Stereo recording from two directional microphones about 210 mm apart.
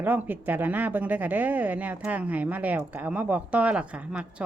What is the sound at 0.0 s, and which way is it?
Speech, 10° right (ahead or behind).